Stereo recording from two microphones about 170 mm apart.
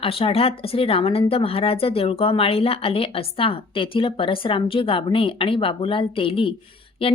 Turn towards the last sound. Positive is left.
turn(degrees=30)  # may be behind; listen again after turning